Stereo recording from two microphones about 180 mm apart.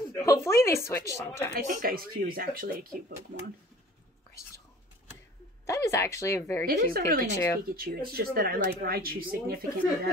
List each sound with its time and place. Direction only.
0.1 s speech: 15° left (ahead or behind)
1.5 s speech: 50° right (ahead or behind)
5.7 s speech: 15° left (ahead or behind)
6.6 s speech: 55° right (ahead or behind)